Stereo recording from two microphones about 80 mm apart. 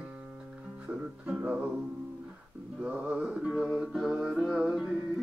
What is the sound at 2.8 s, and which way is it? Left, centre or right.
Music, centre.